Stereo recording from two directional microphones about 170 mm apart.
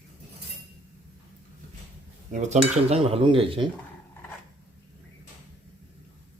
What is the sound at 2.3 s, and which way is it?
Dishes, 45° right (ahead or behind).